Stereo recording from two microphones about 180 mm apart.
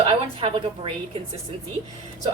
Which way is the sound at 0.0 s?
30° right (ahead or behind).